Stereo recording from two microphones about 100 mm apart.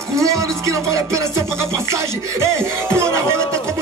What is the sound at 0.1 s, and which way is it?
Music, 30° right (ahead or behind).